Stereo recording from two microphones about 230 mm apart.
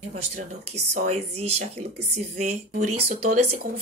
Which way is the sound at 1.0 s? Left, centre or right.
Right.